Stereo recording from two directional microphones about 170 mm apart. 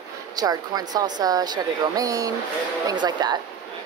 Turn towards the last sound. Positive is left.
turn(degrees=-25)  # may be behind; listen again after turning